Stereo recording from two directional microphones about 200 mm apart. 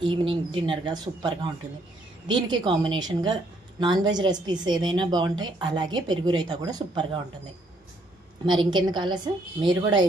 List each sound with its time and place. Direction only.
0.0 s a woman's voice: 25° right (ahead or behind)
8.5 s a woman's voice: 25° right (ahead or behind)